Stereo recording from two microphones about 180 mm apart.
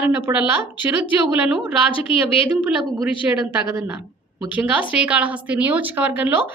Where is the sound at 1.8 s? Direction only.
30° left (ahead or behind).